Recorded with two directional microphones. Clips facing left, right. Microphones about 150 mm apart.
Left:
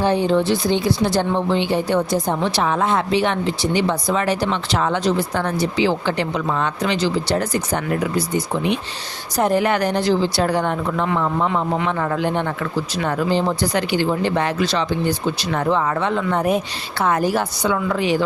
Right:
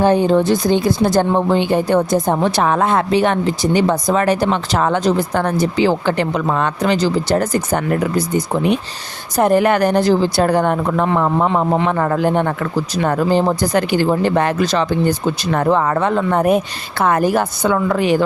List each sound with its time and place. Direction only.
0.0 s speech: 45° right (ahead or behind)